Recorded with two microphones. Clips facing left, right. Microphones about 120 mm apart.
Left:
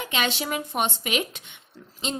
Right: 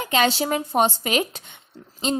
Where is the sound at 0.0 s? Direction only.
40° right (ahead or behind).